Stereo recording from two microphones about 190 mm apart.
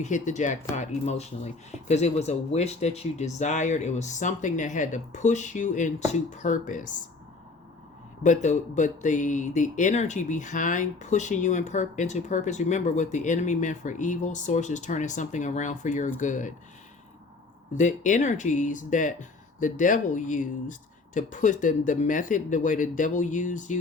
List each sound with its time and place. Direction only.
0.0 s speech: 40° left (ahead or behind)
8.2 s speech: 40° left (ahead or behind)
17.7 s speech: 40° left (ahead or behind)